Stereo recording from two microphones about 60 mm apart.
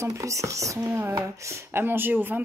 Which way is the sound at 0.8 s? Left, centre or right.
Right.